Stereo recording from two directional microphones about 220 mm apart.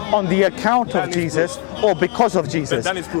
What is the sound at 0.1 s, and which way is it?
Speech, 20° left (ahead or behind).